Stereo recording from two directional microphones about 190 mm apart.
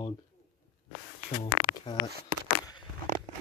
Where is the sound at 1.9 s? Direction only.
20° left (ahead or behind).